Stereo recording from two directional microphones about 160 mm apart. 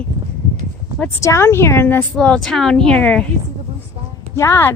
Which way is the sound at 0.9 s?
15° left (ahead or behind).